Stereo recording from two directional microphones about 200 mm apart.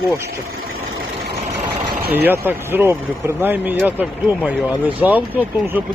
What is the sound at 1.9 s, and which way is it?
Vehicle, 50° right (ahead or behind).